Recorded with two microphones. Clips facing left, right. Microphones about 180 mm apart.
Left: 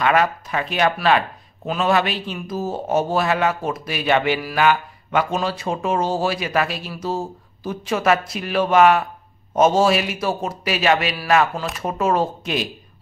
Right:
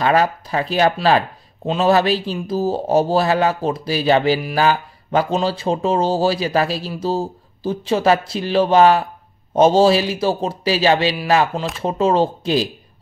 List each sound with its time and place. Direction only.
0.0 s speech: 35° right (ahead or behind)